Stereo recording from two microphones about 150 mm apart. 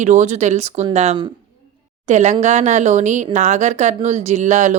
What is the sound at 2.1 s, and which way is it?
Speech, 50° right (ahead or behind).